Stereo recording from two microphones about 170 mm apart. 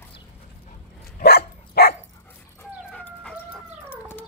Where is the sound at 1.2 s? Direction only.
65° left (ahead or behind).